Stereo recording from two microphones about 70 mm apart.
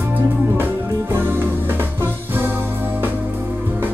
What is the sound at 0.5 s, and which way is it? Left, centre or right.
Music, right.